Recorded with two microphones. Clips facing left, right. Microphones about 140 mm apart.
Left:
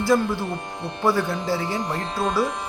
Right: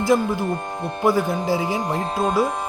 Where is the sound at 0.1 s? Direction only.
20° right (ahead or behind).